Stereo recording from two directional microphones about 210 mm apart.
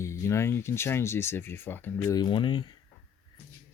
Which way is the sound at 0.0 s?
15° left (ahead or behind).